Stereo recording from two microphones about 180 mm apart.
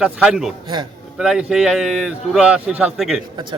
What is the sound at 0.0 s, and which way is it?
Speech, 5° right (ahead or behind).